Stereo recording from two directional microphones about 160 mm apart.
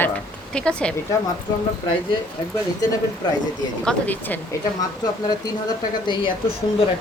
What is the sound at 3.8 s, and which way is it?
Speech, 5° left (ahead or behind).